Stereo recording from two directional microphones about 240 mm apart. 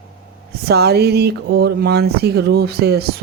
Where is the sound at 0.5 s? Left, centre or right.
Right.